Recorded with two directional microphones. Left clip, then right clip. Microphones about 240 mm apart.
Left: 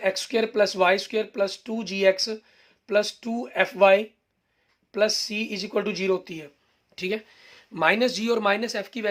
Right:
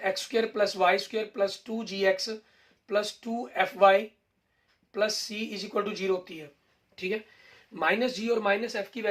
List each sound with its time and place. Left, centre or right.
0.0 s speech: left